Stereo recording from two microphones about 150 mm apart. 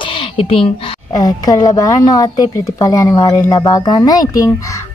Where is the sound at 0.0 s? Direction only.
35° left (ahead or behind).